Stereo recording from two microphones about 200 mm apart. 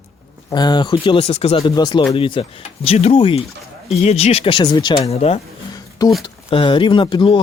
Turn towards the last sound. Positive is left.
turn(degrees=25)  # may be behind; listen again after turning